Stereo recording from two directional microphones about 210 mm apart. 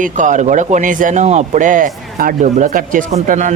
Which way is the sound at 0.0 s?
35° right (ahead or behind).